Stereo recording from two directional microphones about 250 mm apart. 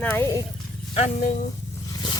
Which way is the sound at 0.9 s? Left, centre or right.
Left.